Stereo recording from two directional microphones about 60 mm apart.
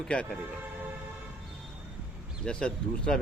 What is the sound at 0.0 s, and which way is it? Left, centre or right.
Speech, centre.